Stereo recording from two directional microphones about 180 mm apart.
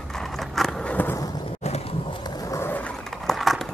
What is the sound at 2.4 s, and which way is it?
Skateboard, 15° left (ahead or behind).